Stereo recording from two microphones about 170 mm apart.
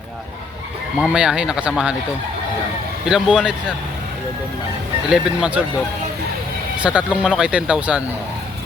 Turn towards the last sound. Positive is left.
turn(degrees=-5)  # may be behind; listen again after turning